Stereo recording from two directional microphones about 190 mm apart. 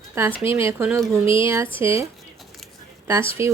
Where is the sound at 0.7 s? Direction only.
15° right (ahead or behind).